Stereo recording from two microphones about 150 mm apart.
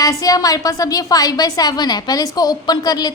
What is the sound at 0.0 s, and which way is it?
A woman's voice, 25° left (ahead or behind).